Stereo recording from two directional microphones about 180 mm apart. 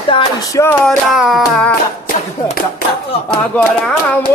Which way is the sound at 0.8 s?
Centre (ahead or behind).